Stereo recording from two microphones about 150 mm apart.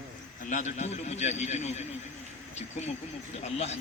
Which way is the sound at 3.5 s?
45° left (ahead or behind).